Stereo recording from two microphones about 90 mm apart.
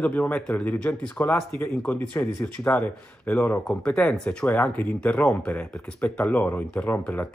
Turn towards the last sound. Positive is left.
turn(degrees=15)  # may be behind; listen again after turning